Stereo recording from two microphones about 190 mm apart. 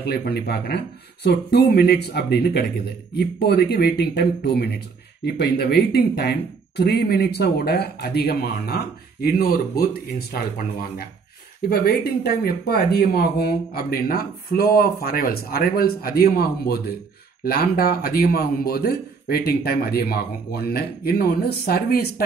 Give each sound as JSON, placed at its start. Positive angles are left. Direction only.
{"t": 0.0, "sound": "a man's voice", "side_deg": 60}